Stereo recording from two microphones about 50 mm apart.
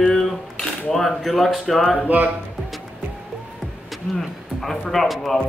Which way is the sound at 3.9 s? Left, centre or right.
Centre.